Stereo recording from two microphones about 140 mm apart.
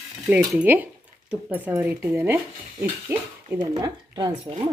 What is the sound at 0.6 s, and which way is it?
Speech, 10° right (ahead or behind).